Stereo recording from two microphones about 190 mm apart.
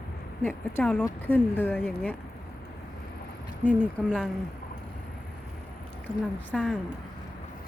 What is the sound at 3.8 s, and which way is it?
Speech, 5° left (ahead or behind).